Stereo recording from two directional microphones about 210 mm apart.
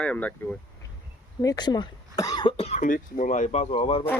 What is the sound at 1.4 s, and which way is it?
Speech, 20° left (ahead or behind).